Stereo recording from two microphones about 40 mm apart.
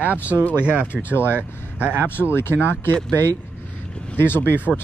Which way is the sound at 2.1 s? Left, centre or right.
Left.